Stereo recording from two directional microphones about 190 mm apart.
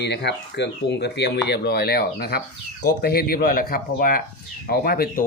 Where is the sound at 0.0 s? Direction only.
60° left (ahead or behind).